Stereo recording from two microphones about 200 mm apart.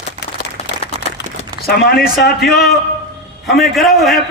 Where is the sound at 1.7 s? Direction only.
50° left (ahead or behind).